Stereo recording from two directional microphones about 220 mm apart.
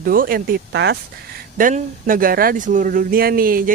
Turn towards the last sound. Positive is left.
turn(degrees=-40)  # may be behind; listen again after turning